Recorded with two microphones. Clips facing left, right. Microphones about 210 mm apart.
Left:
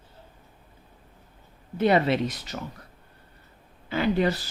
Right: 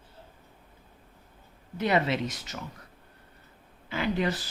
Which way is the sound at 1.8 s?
35° left (ahead or behind).